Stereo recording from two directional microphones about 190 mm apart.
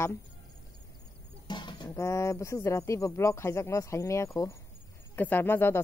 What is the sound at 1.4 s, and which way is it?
Speech, 25° left (ahead or behind).